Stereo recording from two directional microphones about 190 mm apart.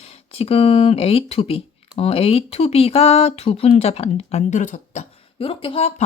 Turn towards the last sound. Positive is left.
turn(degrees=30)  # may be behind; listen again after turning